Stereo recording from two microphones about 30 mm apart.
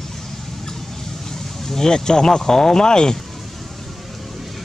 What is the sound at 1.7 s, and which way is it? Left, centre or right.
Speech, centre.